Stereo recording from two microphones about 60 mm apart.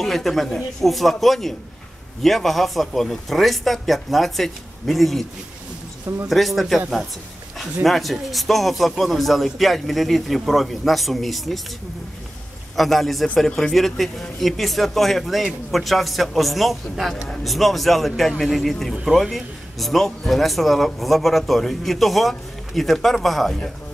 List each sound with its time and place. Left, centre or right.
0.0 s a man's voice: centre
6.2 s a man's voice: centre
7.8 s a man's voice: centre
12.7 s a man's voice: centre